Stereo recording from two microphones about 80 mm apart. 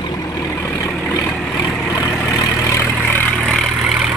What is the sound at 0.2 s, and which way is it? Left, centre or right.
Vehicle, left.